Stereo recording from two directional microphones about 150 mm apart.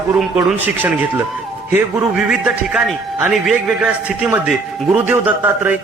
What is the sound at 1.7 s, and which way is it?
A man's voice, 5° right (ahead or behind).